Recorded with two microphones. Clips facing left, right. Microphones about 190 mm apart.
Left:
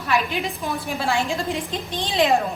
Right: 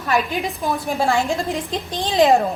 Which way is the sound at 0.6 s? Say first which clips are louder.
Right 5 dB; 35° right (ahead or behind).